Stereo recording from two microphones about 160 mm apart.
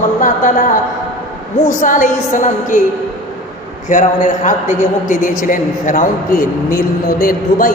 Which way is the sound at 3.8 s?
50° left (ahead or behind).